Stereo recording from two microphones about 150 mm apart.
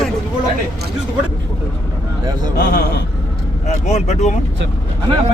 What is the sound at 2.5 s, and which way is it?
Speech, 90° left.